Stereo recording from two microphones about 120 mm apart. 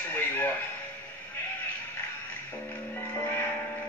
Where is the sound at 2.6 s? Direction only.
15° left (ahead or behind).